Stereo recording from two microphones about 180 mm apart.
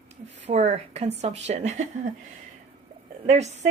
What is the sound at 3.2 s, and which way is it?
Speech, 40° right (ahead or behind).